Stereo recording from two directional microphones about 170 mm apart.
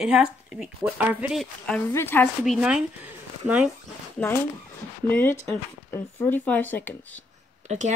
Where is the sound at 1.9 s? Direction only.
15° left (ahead or behind).